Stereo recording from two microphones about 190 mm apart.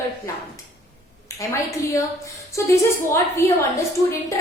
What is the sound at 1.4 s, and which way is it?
Speech, 15° left (ahead or behind).